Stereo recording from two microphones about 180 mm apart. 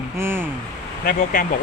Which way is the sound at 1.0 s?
50° left (ahead or behind).